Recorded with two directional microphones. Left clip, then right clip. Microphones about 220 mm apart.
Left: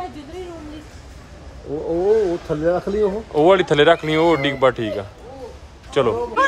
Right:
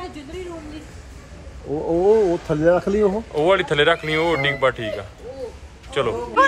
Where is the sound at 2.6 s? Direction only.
35° right (ahead or behind).